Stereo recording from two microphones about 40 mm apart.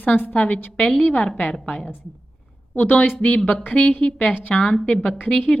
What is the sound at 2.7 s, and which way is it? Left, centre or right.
A woman's voice, left.